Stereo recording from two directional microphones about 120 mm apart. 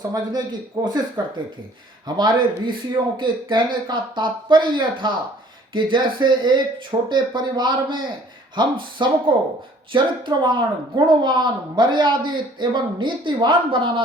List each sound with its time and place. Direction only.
0.1 s speech: 30° right (ahead or behind)